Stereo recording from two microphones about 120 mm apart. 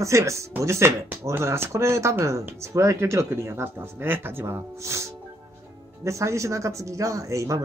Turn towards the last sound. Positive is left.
turn(degrees=-25)  # may be behind; listen again after turning